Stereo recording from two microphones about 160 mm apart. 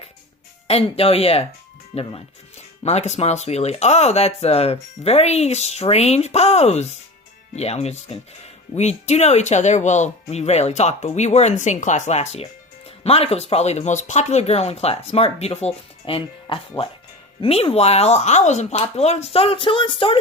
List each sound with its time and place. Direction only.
0.7 s speech: 40° left (ahead or behind)